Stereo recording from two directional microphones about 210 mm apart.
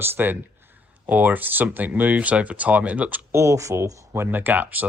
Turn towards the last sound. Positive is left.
turn(degrees=-10)  # may be behind; listen again after turning